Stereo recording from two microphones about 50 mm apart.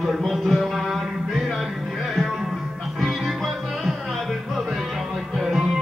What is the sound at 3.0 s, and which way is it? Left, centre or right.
Music, centre.